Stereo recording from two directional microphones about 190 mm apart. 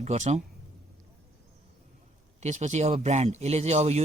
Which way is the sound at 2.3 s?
40° right (ahead or behind).